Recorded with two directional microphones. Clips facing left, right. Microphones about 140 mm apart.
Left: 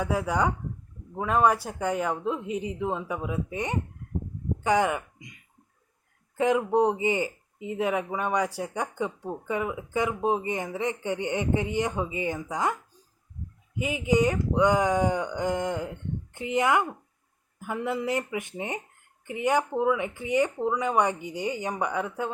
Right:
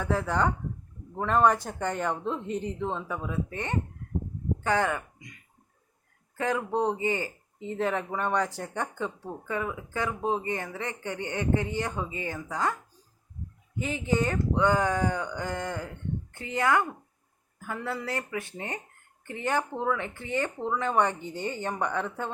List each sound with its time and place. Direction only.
0.0 s speech: 10° left (ahead or behind)
13.7 s speech: 10° left (ahead or behind)